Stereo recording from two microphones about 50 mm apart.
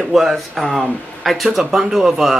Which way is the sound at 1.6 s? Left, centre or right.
Centre.